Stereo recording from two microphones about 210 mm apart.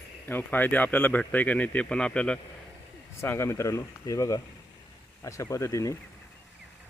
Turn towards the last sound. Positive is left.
turn(degrees=15)  # may be behind; listen again after turning